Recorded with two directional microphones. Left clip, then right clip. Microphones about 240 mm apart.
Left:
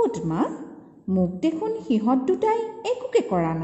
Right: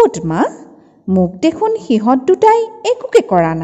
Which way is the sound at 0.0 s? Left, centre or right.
Right.